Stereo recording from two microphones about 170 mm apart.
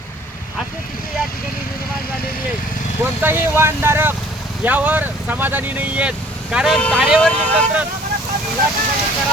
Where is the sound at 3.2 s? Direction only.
15° right (ahead or behind); by 7.7 s 5° left (ahead or behind).